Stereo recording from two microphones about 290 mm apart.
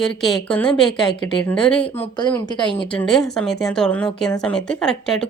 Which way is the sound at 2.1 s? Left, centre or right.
Centre.